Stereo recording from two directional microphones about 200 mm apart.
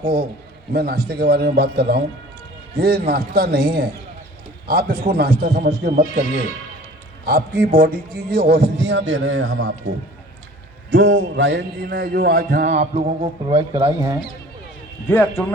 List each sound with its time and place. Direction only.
0.7 s a man's voice: 50° right (ahead or behind); by 9.9 s 75° right (ahead or behind)
10.9 s a man's voice: 70° right (ahead or behind); by 13.8 s 25° right (ahead or behind)
13.8 s speech: 15° right (ahead or behind)
15.0 s a man's voice: 10° left (ahead or behind)